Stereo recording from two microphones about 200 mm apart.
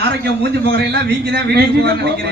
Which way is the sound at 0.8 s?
55° right (ahead or behind).